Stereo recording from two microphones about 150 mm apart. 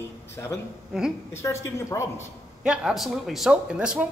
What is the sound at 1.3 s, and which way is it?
Speech, 15° left (ahead or behind).